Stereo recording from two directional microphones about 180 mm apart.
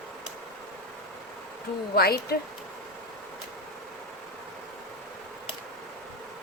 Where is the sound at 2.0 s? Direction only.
60° left (ahead or behind).